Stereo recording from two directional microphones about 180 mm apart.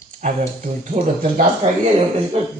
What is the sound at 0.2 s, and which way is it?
Speech, 45° right (ahead or behind).